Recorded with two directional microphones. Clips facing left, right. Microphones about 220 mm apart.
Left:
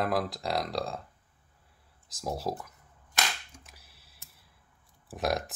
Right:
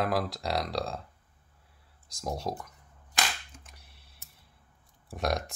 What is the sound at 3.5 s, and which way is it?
Cap gun, 5° left (ahead or behind).